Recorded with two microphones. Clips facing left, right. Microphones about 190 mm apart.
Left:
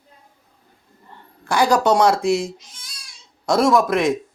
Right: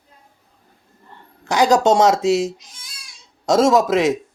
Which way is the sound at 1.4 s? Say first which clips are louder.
Right 2 dB; 20° right (ahead or behind).